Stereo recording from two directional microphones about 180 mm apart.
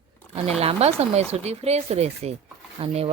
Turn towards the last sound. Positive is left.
turn(degrees=-35)  # may be behind; listen again after turning